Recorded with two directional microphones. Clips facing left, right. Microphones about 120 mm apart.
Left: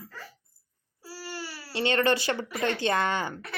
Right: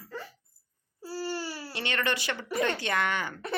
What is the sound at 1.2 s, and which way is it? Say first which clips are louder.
Baby cry: right 5 dB; 25° right (ahead or behind).